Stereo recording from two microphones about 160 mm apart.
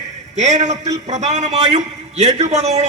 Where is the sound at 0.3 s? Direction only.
45° right (ahead or behind).